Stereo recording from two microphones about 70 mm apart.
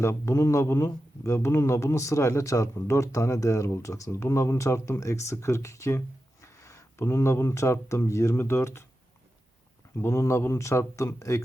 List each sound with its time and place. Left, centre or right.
0.0 s a man's voice: left
10.0 s a man's voice: left